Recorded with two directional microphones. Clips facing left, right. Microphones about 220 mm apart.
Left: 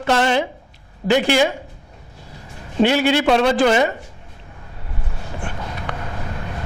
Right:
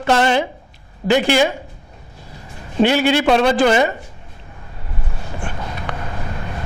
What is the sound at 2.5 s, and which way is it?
A man's voice, 15° right (ahead or behind).